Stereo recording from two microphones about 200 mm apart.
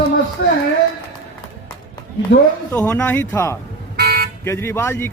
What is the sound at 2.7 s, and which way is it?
Speech, 10° left (ahead or behind).